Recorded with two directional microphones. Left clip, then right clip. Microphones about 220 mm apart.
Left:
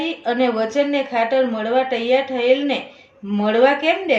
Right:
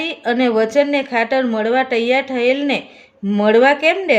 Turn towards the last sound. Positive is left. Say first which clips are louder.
# right 3 dB
turn(degrees=-50)  # may be behind; listen again after turning